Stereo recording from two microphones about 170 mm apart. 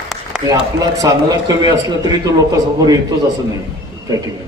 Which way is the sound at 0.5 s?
20° right (ahead or behind).